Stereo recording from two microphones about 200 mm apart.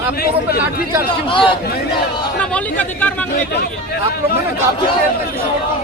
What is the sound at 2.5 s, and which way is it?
Speech, 10° left (ahead or behind).